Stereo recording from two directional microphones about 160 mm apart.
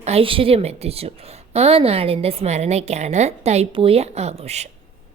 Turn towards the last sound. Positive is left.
turn(degrees=-40)  # may be behind; listen again after turning